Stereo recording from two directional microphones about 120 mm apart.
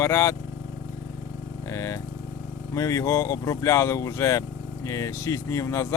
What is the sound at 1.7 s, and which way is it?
Speech, 25° left (ahead or behind).